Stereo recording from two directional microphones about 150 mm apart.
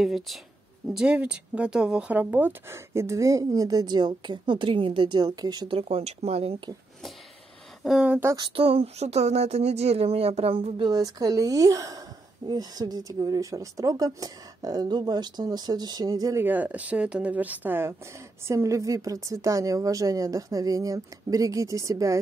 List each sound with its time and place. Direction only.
0.0 s speech: centre (ahead or behind); by 5.8 s 25° right (ahead or behind)
5.8 s speech: 45° right (ahead or behind)
7.8 s speech: 5° right (ahead or behind)
8.4 s speech: 40° right (ahead or behind); by 16.4 s 25° right (ahead or behind)
16.4 s speech: 10° right (ahead or behind)